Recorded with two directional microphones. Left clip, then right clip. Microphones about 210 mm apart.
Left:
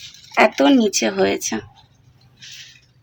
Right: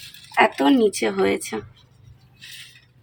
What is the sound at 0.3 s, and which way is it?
Speech, 30° left (ahead or behind).